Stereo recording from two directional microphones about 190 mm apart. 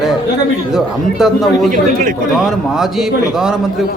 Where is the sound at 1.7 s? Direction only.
45° right (ahead or behind).